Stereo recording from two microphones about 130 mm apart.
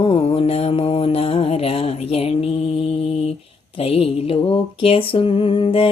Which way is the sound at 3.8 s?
50° left (ahead or behind).